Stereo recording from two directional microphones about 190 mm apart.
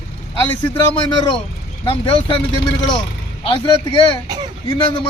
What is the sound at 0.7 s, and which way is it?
Speech, 25° left (ahead or behind).